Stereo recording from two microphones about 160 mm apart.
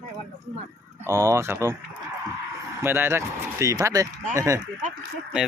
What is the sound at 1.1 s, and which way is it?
Speech, 20° right (ahead or behind).